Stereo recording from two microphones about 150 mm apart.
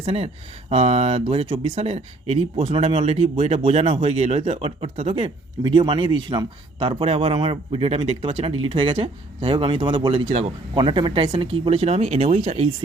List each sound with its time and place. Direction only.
0.0 s speech: 40° right (ahead or behind)